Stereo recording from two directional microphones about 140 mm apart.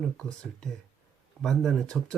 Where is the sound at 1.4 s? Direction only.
Centre (ahead or behind).